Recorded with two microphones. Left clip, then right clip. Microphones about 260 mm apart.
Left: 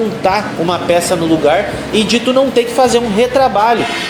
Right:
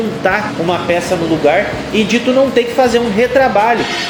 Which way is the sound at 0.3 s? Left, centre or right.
Left.